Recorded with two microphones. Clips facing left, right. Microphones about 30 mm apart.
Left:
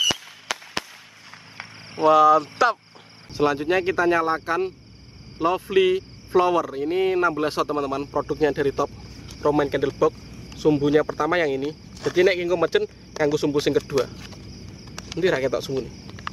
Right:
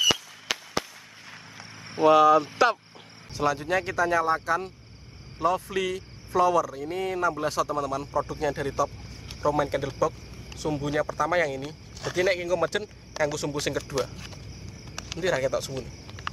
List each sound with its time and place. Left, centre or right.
0.0 s fireworks: centre
1.6 s a sound: left
2.0 s speech: centre
3.3 s speech: left
12.0 s speech: centre